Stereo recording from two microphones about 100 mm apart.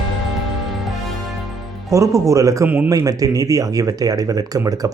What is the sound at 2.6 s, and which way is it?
Speech, 15° right (ahead or behind).